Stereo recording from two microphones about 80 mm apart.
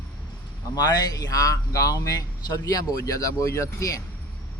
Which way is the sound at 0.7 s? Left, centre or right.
Left.